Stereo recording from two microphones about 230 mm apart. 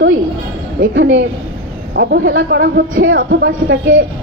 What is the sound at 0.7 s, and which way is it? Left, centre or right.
Speech, right.